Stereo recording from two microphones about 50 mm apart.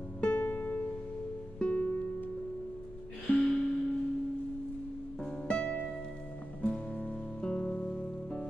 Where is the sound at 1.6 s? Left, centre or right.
Left.